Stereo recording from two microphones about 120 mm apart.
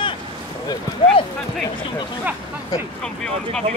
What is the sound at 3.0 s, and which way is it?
Speech, 5° left (ahead or behind).